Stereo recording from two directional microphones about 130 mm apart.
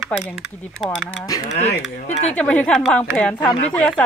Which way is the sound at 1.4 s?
60° left (ahead or behind).